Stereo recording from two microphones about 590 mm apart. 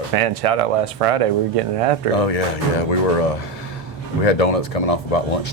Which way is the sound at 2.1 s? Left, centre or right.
Left.